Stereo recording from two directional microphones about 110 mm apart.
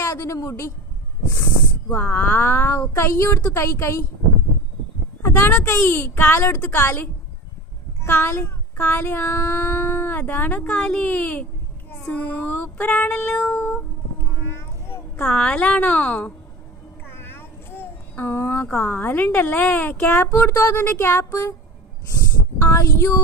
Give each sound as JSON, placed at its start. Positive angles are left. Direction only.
{"t": 0.0, "sound": "speech", "side_deg": 25}
{"t": 1.9, "sound": "child singing", "side_deg": 15}
{"t": 5.2, "sound": "child singing", "side_deg": 20}
{"t": 14.4, "sound": "a sound", "side_deg": 20}
{"t": 15.2, "sound": "child singing", "side_deg": 5}
{"t": 17.1, "sound": "a child's voice", "side_deg": 20}
{"t": 21.2, "sound": "child singing", "side_deg": 30}
{"t": 22.5, "sound": "child singing", "side_deg": 20}